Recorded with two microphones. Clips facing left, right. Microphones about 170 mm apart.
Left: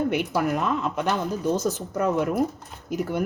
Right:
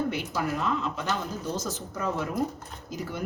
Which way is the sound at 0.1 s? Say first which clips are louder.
Left 6 dB; 60° left (ahead or behind).